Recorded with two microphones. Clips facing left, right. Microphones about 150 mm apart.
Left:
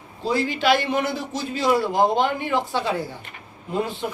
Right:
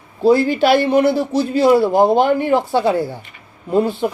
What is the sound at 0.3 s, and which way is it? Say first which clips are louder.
Speech: right 8 dB; 40° right (ahead or behind).